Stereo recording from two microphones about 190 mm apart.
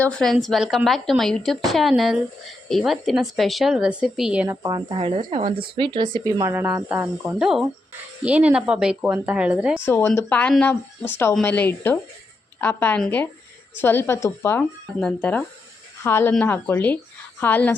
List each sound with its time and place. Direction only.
0.0 s a woman's voice: 5° left (ahead or behind)
4.4 s a woman's voice: 20° right (ahead or behind)
9.8 s a woman's voice: 10° left (ahead or behind)